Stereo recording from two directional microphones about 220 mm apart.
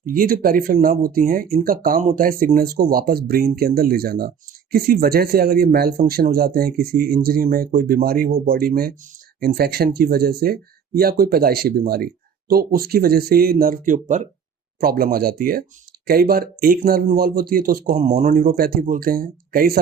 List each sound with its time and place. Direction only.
0.0 s speech: 40° right (ahead or behind)